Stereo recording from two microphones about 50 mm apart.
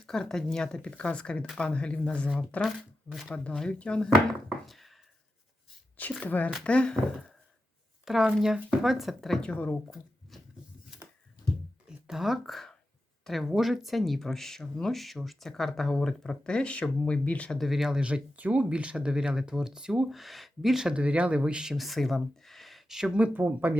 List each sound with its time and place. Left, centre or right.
0.0 s speech: centre
2.6 s speech: centre
3.2 s speech: left
4.6 s knock: centre
6.0 s speech: left
6.7 s speech: centre
8.0 s speech: centre
9.9 s a sound: centre
12.0 s speech: centre; by 17.5 s left
17.6 s speech: centre
17.8 s speech: centre
20.9 s speech: right
21.8 s speech: centre
23.3 s speech: right